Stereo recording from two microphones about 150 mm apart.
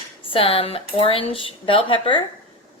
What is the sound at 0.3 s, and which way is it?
Speech, 40° left (ahead or behind).